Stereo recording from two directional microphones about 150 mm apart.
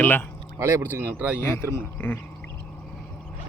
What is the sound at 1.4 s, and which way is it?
Speech, 15° left (ahead or behind).